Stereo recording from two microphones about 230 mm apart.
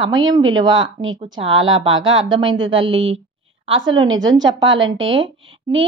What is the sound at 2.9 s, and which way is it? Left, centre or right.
A woman's voice, right.